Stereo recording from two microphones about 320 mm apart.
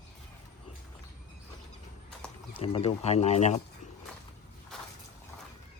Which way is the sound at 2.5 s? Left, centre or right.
Centre.